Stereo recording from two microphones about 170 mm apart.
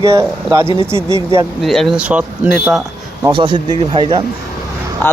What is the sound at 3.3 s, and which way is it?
Speech, 25° right (ahead or behind).